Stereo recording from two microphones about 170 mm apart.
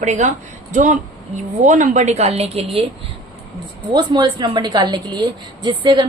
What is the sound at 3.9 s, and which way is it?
A woman's voice, 25° right (ahead or behind).